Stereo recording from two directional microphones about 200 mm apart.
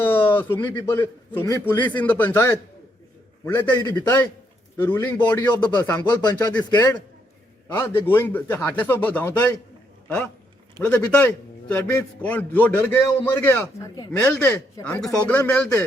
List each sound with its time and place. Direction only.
0.0 s a sound: 10° left (ahead or behind)
0.5 s a man's voice: 10° left (ahead or behind)
5.5 s a man's voice: 20° left (ahead or behind)
10.8 s a man's voice: 5° left (ahead or behind)